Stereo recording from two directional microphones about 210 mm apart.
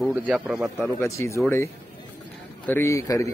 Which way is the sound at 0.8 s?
15° left (ahead or behind).